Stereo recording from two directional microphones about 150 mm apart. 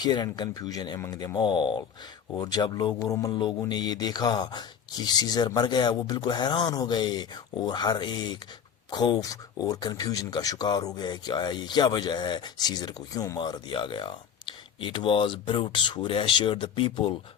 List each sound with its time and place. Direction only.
0.0 s speech: 30° left (ahead or behind)